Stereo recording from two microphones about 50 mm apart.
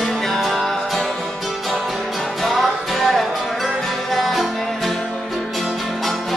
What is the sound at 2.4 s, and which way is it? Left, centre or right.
Music, centre.